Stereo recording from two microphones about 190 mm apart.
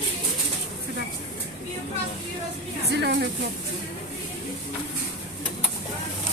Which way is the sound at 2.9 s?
60° right (ahead or behind).